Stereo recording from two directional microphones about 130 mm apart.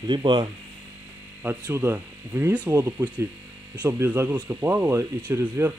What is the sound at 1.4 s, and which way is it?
Speech, 20° right (ahead or behind).